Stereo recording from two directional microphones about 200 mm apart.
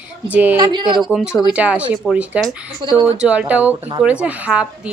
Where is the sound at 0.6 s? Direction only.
25° right (ahead or behind).